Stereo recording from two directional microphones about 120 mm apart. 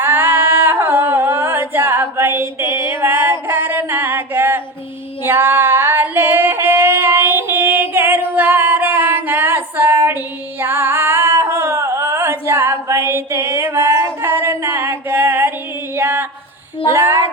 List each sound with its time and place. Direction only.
0.0 s singing: 15° right (ahead or behind)
5.2 s female singing: 20° right (ahead or behind)
16.9 s child singing: 20° right (ahead or behind)